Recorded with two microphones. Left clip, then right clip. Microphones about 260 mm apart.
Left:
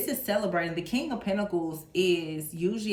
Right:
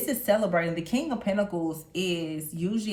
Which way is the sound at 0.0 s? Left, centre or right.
Right.